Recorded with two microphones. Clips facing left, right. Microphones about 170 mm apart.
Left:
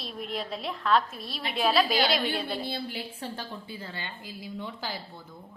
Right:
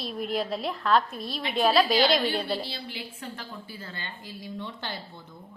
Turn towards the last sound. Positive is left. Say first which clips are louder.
# even
turn(degrees=5)  # may be behind; listen again after turning